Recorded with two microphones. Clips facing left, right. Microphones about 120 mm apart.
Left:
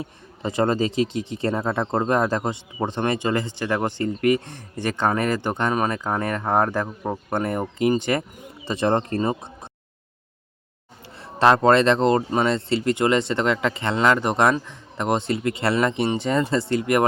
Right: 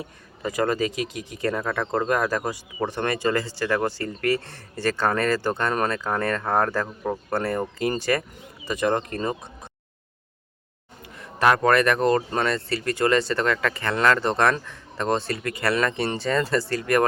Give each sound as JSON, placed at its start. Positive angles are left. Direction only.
{"t": 0.0, "sound": "speech", "side_deg": 25}
{"t": 11.2, "sound": "speech", "side_deg": 30}